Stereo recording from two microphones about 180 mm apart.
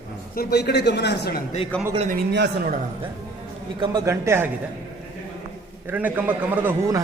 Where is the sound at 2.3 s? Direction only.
65° right (ahead or behind).